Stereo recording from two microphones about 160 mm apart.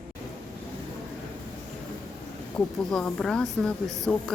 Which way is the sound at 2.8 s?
5° left (ahead or behind).